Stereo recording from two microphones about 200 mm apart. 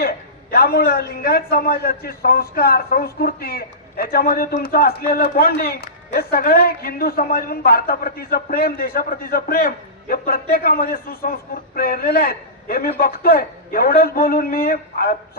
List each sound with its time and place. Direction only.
0.0 s a man's voice: 50° left (ahead or behind)